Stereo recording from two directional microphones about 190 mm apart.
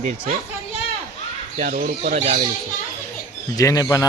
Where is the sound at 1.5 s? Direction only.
45° right (ahead or behind).